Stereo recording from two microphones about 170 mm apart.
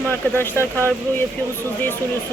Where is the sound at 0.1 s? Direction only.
15° left (ahead or behind).